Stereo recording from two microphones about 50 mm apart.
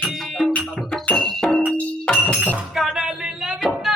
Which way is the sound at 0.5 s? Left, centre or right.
Left.